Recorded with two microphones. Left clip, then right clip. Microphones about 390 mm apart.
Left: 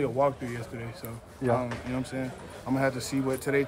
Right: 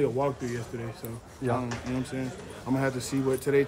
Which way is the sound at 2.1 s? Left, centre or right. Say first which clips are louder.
Even; centre.